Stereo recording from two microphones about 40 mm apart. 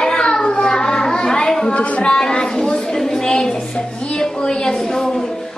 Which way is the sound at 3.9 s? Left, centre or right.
Left.